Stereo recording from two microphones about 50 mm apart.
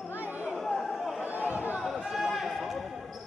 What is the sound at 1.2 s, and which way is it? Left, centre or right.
Chatter, right.